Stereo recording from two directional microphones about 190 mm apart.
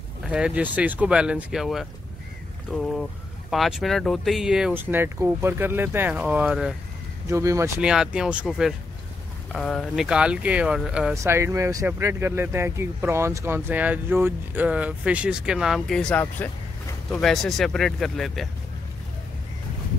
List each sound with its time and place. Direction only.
0.2 s speech: 5° right (ahead or behind)
7.2 s speech: 15° right (ahead or behind)
7.8 s speech: 5° right (ahead or behind)